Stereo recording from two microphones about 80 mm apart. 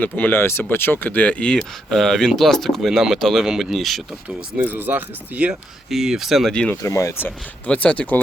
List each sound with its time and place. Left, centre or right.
0.0 s speech: left
1.5 s speech: centre
4.5 s speech: right
5.9 s speech: centre
6.5 s speech: centre
6.8 s speech: left
7.7 s speech: centre